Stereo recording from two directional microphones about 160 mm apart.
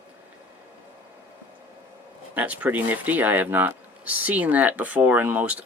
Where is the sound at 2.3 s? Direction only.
10° right (ahead or behind).